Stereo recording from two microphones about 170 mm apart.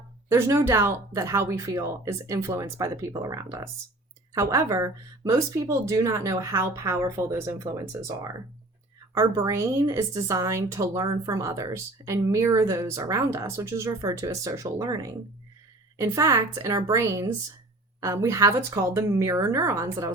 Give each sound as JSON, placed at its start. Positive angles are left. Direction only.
{"t": 0.3, "sound": "a woman's voice", "side_deg": -15}